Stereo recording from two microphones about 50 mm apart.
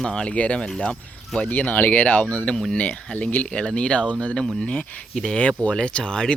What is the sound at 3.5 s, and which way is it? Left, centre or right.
Speech, centre.